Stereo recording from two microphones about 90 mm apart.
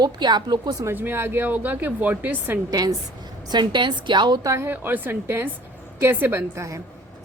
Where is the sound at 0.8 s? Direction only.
25° right (ahead or behind).